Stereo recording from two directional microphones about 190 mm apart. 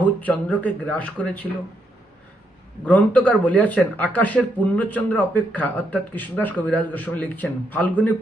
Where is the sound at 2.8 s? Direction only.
5° left (ahead or behind).